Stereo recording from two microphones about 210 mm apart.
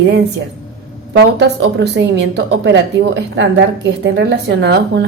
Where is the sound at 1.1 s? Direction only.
55° right (ahead or behind).